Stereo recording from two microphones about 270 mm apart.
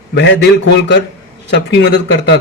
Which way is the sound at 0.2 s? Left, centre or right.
Left.